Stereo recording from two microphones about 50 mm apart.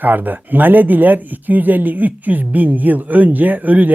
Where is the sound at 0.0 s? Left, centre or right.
Right.